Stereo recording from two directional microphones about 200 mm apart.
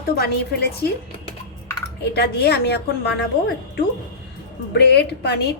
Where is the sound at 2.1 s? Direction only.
55° left (ahead or behind).